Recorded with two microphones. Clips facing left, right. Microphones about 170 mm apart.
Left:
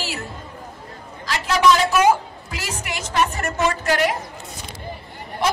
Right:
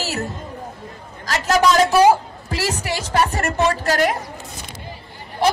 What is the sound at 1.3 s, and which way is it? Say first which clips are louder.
A woman's voice: right 1 dB; 45° right (ahead or behind).